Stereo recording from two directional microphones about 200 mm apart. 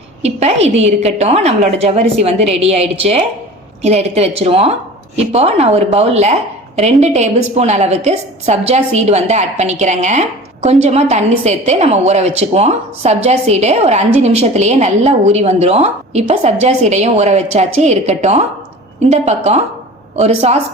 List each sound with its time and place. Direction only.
0.2 s a woman's voice: 35° right (ahead or behind)